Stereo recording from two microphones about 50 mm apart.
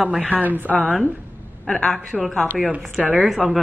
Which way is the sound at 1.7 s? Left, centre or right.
Centre.